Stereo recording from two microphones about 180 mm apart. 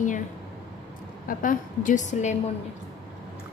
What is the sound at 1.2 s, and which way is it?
A woman's voice, 50° left (ahead or behind).